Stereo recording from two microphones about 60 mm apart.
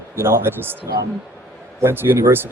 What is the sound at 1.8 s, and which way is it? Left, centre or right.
Speech, right.